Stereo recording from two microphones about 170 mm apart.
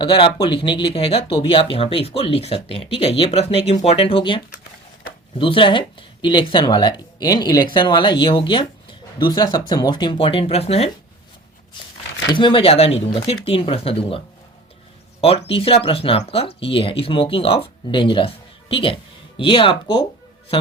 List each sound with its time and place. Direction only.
0.0 s speech: 30° left (ahead or behind)
5.4 s speech: 30° left (ahead or behind)
12.3 s speech: 30° left (ahead or behind)
15.2 s speech: 35° left (ahead or behind)